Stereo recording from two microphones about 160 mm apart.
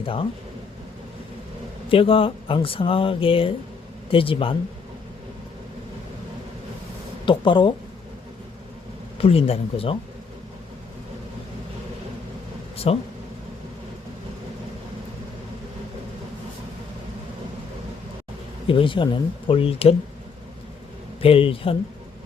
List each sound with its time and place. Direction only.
0.0 s speech: 35° left (ahead or behind)
1.9 s speech: 35° left (ahead or behind)
7.3 s speech: 30° left (ahead or behind)
9.1 s speech: 35° left (ahead or behind)
12.7 s a sound: 40° left (ahead or behind)
18.7 s speech: 30° left (ahead or behind)
21.2 s speech: 35° left (ahead or behind)